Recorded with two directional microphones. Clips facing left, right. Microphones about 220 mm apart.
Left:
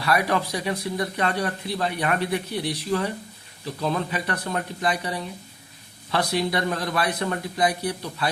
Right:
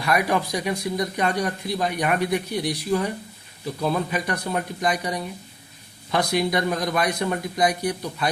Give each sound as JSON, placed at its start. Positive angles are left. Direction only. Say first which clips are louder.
{"t": 0.0, "sound": "speech", "louder": "right 1 dB", "side_deg": -15}